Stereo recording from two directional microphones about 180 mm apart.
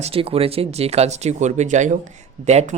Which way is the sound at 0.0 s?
30° right (ahead or behind).